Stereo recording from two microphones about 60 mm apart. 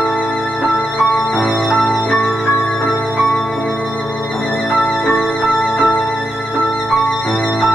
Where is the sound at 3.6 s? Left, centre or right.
Left.